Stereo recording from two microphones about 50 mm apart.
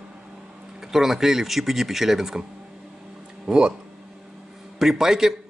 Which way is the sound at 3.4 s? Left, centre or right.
Centre.